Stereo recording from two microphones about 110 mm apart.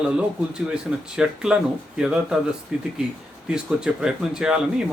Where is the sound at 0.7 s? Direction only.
5° right (ahead or behind).